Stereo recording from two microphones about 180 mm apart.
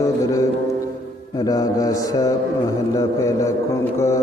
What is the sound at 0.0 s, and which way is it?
Speech, 20° left (ahead or behind).